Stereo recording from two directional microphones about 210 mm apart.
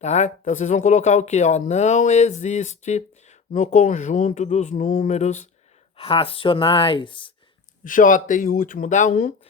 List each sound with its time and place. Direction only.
0.0 s speech: 35° left (ahead or behind)
7.9 s speech: 40° left (ahead or behind)